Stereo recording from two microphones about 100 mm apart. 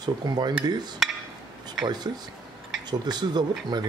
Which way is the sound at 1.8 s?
45° right (ahead or behind).